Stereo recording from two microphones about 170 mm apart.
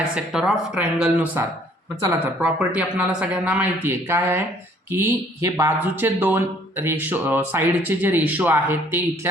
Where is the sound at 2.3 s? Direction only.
5° right (ahead or behind).